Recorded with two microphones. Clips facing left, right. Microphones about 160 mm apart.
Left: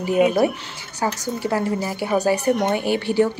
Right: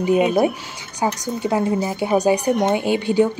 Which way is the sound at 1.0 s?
20° right (ahead or behind).